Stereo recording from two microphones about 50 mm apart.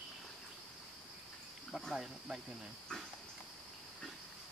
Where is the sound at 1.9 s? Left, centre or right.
Centre.